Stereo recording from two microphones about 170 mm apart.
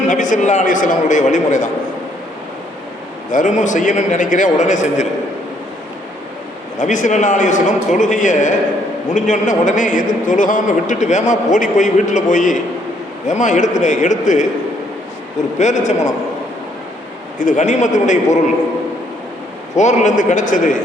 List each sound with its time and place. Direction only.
0.1 s a man's voice: 50° left (ahead or behind)
3.3 s a man's voice: 45° left (ahead or behind)
6.7 s a man's voice: 50° left (ahead or behind)
15.5 s a man's voice: 45° left (ahead or behind)
17.4 s a man's voice: 45° left (ahead or behind)
19.7 s a man's voice: 45° left (ahead or behind)